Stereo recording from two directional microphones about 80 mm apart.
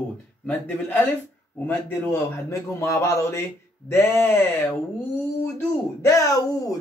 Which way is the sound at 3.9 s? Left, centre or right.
Left.